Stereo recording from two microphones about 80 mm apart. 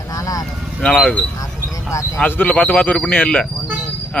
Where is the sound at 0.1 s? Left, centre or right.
Left.